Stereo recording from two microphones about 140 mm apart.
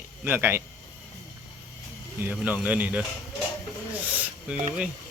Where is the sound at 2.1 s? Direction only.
10° right (ahead or behind).